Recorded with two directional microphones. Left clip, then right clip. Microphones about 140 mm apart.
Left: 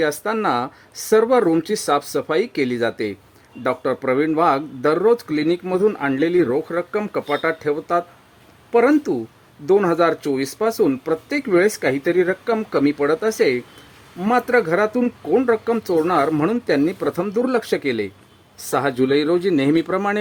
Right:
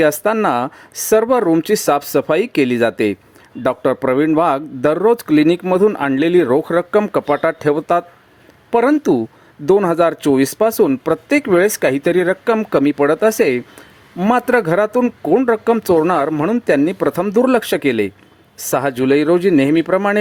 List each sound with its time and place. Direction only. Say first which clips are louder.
0.0 s speech: right 6 dB; 30° right (ahead or behind)
15.0 s speech: right 4 dB; 25° right (ahead or behind)